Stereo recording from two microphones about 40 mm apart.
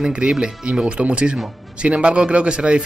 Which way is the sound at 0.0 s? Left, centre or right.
Right.